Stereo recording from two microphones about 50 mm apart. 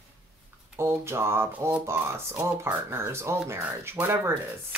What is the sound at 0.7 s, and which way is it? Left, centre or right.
Speech, right.